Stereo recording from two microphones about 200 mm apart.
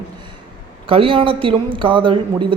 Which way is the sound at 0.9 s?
25° right (ahead or behind).